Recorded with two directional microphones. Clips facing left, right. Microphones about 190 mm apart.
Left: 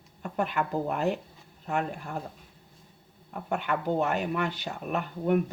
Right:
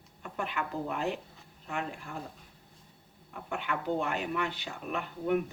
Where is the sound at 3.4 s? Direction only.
45° left (ahead or behind).